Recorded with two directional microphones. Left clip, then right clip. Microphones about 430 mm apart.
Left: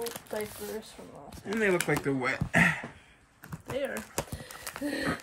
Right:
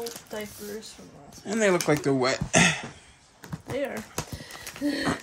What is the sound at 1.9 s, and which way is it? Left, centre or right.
Speech, right.